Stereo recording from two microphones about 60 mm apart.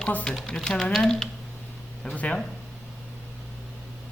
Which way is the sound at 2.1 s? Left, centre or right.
Left.